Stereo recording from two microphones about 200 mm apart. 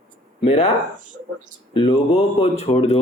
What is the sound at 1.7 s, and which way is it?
Speech, 30° left (ahead or behind).